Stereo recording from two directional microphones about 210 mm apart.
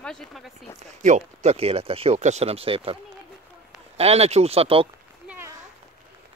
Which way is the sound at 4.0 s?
30° right (ahead or behind).